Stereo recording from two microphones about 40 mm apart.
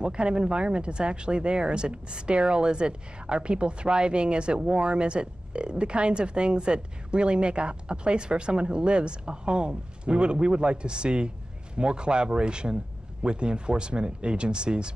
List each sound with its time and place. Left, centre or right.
0.0 s speech: right